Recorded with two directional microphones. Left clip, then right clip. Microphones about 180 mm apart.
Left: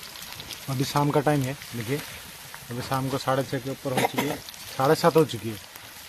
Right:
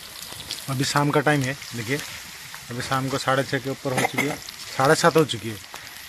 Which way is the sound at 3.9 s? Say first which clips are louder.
Right 1 dB; 20° left (ahead or behind).